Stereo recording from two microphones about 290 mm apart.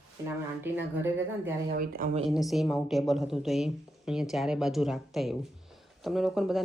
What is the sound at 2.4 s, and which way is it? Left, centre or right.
A woman's voice, centre.